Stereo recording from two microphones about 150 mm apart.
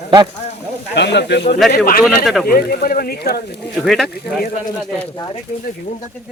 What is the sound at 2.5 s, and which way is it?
Speech, 80° left.